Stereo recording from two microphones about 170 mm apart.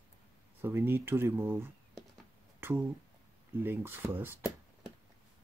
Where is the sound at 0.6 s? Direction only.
15° right (ahead or behind).